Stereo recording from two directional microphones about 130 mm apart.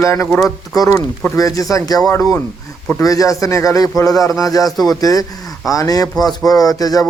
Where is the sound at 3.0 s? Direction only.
25° left (ahead or behind).